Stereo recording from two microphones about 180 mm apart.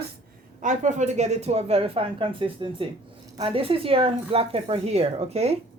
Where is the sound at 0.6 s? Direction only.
45° right (ahead or behind).